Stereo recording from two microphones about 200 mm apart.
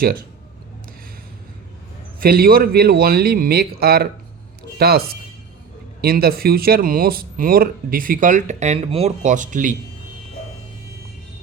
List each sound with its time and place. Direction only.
2.2 s speech: 50° right (ahead or behind)